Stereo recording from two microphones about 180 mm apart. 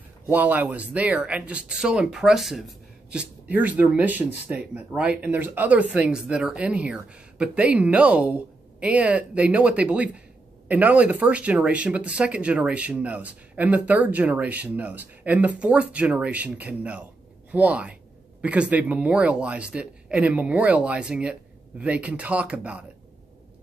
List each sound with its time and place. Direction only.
0.3 s speech: 10° right (ahead or behind)